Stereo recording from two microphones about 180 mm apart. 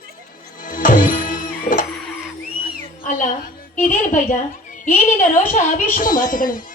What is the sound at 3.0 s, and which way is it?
Speech, 45° left (ahead or behind).